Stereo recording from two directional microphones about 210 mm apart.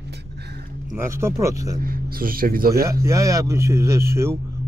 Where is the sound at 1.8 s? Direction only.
45° right (ahead or behind).